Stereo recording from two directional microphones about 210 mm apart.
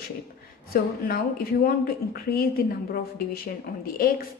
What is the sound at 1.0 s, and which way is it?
A woman's voice, 45° left (ahead or behind).